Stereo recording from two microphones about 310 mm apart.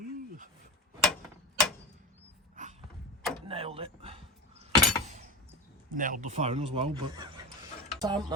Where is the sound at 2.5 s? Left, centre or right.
Right.